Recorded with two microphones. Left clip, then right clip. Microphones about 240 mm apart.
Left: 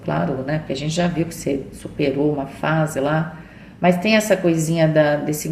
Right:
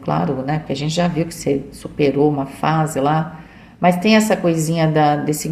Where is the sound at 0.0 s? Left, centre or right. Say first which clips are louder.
Right 2 dB; right.